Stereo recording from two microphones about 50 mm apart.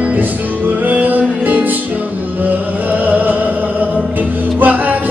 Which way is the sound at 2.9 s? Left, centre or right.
Right.